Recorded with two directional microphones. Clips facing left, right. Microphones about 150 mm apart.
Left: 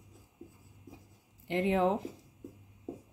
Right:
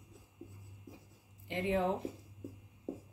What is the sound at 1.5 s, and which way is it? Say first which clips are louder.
Speech: left 4 dB; 90° left.